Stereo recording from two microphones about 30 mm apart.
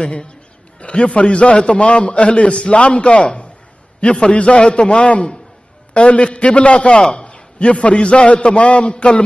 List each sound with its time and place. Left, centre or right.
0.0 s a man's voice: left